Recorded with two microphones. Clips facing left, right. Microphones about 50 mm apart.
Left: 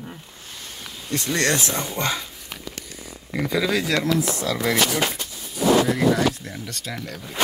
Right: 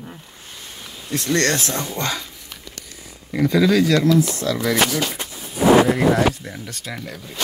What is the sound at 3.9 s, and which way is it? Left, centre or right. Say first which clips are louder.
Speech: right 5 dB; centre.